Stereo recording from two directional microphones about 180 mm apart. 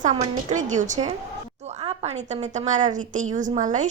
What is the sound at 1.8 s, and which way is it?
A woman's voice, 30° right (ahead or behind).